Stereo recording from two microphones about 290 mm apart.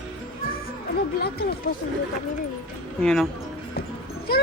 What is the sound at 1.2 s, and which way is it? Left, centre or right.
Speech, left.